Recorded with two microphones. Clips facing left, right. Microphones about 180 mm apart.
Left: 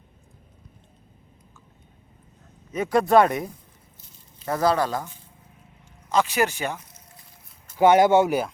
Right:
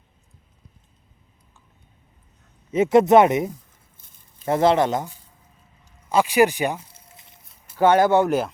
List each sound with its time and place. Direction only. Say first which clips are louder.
2.7 s speech: right 4 dB; 25° right (ahead or behind)
6.1 s speech: right 5 dB; 10° right (ahead or behind)
6.7 s a sound: right 3 dB; 30° right (ahead or behind)
7.8 s speech: even; 15° left (ahead or behind)